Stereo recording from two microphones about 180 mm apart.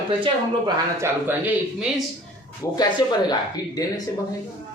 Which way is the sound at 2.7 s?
25° left (ahead or behind).